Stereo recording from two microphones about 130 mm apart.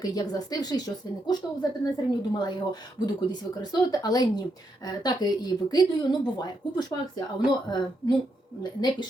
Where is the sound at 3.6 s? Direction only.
30° left (ahead or behind).